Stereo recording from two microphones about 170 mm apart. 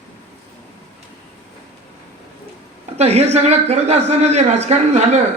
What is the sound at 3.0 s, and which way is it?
A man's voice, 40° right (ahead or behind).